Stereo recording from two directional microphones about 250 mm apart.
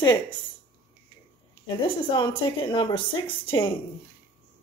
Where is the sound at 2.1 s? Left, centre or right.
Centre.